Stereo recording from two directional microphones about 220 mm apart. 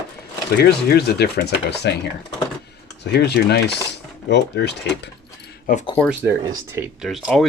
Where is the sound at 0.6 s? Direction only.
45° left (ahead or behind).